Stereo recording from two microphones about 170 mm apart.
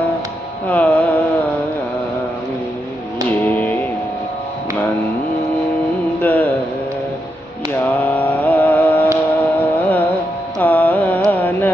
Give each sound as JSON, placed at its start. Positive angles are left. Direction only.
{"t": 0.7, "sound": "music", "side_deg": 10}
{"t": 3.3, "sound": "music", "side_deg": 10}
{"t": 6.2, "sound": "mantra", "side_deg": 10}
{"t": 7.8, "sound": "mantra", "side_deg": 10}
{"t": 9.4, "sound": "music", "side_deg": 10}
{"t": 10.6, "sound": "carnatic music", "side_deg": 10}